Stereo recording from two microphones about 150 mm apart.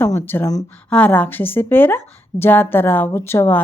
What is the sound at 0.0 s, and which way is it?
A woman's voice, 15° left (ahead or behind).